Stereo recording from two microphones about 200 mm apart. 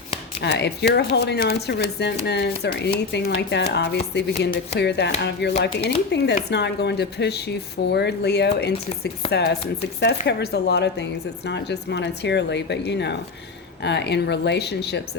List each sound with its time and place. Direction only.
0.3 s speech: 55° left (ahead or behind)